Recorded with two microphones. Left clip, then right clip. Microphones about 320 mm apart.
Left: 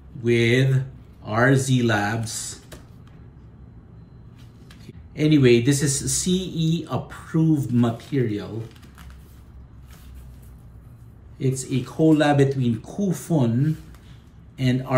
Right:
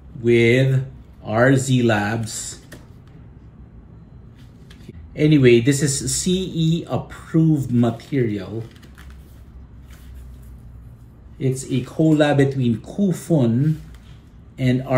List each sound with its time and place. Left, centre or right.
0.2 s speech: centre
4.8 s speech: centre
7.1 s speech: left
7.7 s speech: centre
11.3 s speech: centre
14.6 s speech: centre